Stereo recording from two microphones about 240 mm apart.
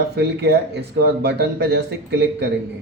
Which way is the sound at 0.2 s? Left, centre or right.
Right.